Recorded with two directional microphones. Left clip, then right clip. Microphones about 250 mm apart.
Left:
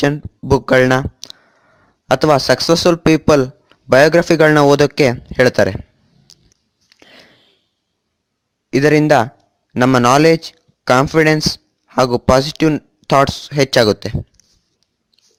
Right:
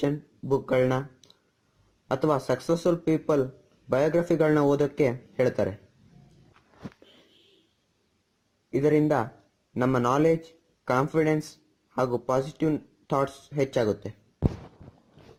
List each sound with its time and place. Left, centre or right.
0.0 s speech: left
8.7 s speech: left